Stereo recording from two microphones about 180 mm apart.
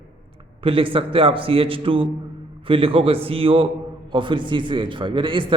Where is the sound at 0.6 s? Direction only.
30° right (ahead or behind).